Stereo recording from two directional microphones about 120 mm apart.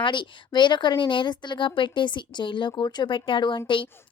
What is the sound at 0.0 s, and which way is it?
A woman's voice, 40° left (ahead or behind).